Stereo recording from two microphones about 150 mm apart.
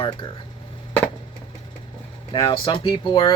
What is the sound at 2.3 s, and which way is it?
Speech, 30° left (ahead or behind).